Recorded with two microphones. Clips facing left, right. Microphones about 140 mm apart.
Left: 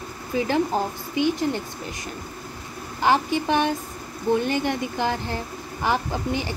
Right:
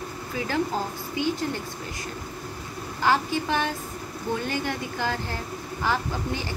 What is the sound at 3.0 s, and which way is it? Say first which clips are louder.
A woman's voice: left 3 dB; 20° left (ahead or behind).